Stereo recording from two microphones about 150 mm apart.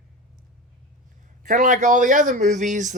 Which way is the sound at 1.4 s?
55° right (ahead or behind).